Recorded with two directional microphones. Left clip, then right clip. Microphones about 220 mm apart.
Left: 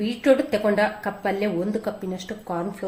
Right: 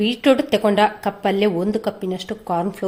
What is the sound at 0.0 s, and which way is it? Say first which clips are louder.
Speech: right 3 dB; 45° right (ahead or behind).